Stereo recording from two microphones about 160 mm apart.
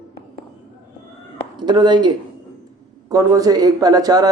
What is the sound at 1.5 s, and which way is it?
Speech, 25° right (ahead or behind).